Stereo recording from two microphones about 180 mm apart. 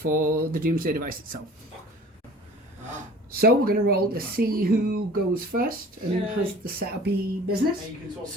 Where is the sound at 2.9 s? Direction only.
55° right (ahead or behind).